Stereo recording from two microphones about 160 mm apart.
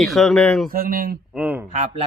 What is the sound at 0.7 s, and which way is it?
Speech, 65° right (ahead or behind).